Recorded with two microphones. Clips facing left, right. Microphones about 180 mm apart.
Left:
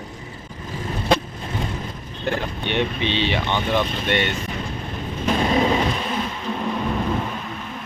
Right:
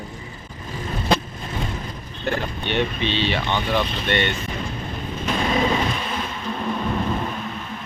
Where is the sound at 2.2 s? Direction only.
15° left (ahead or behind).